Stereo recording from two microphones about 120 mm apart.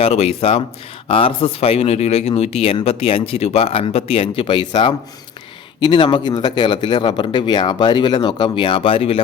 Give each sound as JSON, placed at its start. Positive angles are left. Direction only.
{"t": 0.0, "sound": "speech", "side_deg": 60}